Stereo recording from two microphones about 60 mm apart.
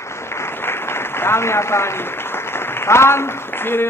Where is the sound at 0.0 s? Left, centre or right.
Left.